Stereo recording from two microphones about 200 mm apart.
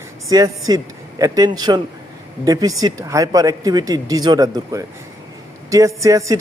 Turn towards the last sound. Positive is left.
turn(degrees=-15)  # may be behind; listen again after turning